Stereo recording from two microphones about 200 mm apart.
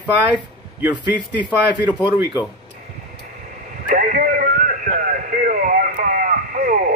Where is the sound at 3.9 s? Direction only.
45° right (ahead or behind).